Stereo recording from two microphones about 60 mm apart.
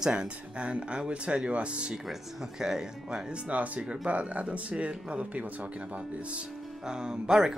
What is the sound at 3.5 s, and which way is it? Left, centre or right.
Speech, right.